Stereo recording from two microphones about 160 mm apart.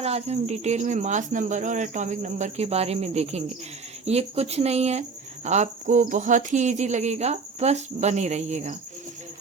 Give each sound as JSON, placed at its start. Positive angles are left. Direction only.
{"t": 0.0, "sound": "speech", "side_deg": -40}